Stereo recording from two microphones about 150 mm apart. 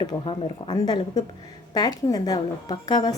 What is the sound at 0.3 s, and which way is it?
A woman's voice, 30° left (ahead or behind).